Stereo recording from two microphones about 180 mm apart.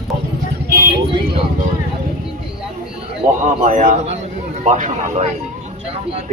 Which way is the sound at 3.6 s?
40° right (ahead or behind).